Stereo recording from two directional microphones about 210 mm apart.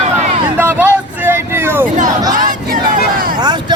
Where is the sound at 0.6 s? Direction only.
10° right (ahead or behind).